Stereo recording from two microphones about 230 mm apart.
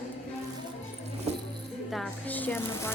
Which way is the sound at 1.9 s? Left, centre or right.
Centre.